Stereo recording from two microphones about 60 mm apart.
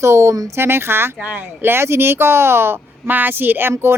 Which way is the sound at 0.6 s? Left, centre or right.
Right.